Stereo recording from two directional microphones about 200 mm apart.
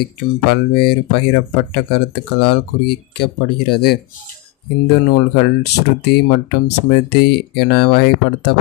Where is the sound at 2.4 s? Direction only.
55° left (ahead or behind).